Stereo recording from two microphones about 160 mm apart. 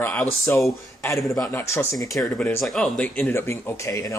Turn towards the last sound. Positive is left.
turn(degrees=20)  # may be behind; listen again after turning